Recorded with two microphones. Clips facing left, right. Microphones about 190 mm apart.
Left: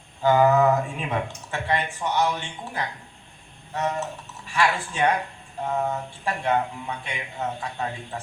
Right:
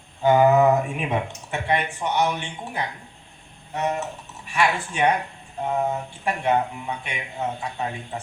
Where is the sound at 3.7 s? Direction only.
15° right (ahead or behind).